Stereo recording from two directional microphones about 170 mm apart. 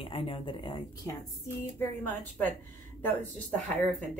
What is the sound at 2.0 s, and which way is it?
Speech, 10° left (ahead or behind).